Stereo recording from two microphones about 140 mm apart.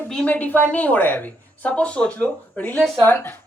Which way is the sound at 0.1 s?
10° left (ahead or behind).